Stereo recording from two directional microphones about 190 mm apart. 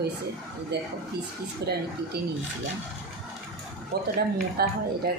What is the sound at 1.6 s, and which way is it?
Speech, 60° right (ahead or behind).